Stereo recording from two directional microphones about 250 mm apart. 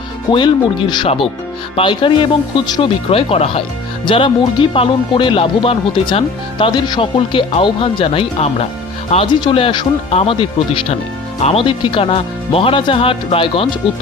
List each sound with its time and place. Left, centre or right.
0.3 s speech: centre